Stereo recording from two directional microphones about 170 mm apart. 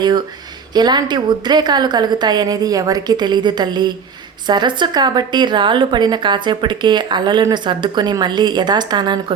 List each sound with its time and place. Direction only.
0.0 s speech: 25° right (ahead or behind)